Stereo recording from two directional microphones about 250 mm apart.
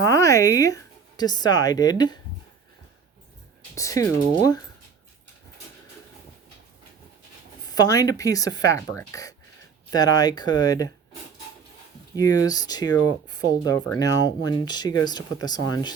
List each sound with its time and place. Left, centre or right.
0.0 s speech: centre
3.8 s speech: centre
7.6 s speech: centre
12.1 s speech: centre